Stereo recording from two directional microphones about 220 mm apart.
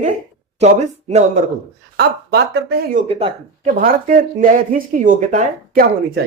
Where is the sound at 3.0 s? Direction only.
25° right (ahead or behind).